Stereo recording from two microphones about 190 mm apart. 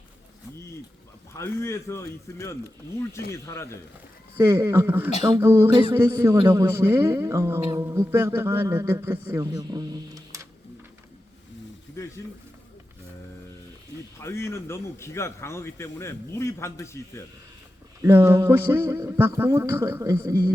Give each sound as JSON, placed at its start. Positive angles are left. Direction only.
{"t": 1.3, "sound": "a man's voice", "side_deg": 15}
{"t": 4.4, "sound": "speech", "side_deg": -15}
{"t": 14.2, "sound": "a man's voice", "side_deg": 15}
{"t": 18.0, "sound": "speech", "side_deg": -15}